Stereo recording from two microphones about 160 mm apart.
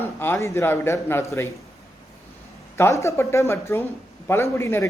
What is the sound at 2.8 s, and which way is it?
Speech, 20° left (ahead or behind).